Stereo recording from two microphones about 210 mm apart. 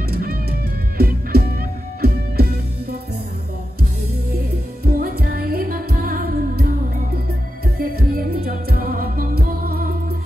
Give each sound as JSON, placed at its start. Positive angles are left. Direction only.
{"t": 0.1, "sound": "music", "side_deg": -45}
{"t": 4.8, "sound": "music", "side_deg": -45}